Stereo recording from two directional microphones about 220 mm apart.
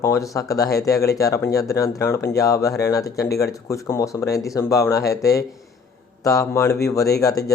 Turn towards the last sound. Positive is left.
turn(degrees=15)  # may be behind; listen again after turning